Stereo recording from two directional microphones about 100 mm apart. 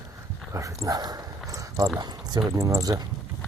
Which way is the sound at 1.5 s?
35° right (ahead or behind).